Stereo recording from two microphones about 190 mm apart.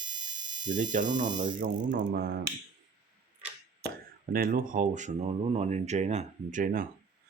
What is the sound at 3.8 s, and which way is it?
Speech, 55° right (ahead or behind).